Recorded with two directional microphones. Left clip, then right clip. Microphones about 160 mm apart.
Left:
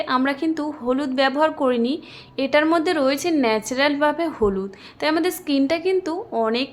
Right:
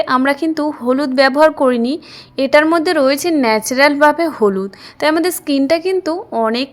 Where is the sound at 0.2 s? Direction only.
40° right (ahead or behind).